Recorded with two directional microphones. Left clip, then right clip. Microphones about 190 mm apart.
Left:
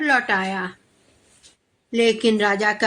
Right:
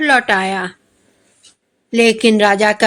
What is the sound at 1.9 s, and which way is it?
Speech, 40° right (ahead or behind).